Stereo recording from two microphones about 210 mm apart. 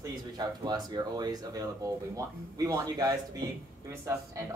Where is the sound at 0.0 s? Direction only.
20° right (ahead or behind).